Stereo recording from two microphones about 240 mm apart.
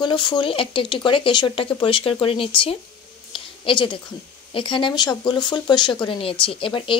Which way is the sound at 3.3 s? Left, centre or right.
Left.